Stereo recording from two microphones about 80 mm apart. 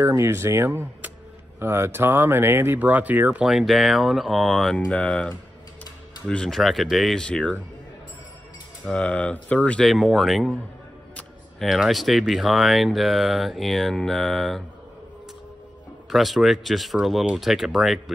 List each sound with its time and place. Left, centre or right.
0.0 s speech: right
3.4 s speech: centre
4.7 s speech: centre
7.2 s speech: centre
8.8 s speech: centre
9.8 s speech: centre
11.6 s speech: centre
16.1 s speech: centre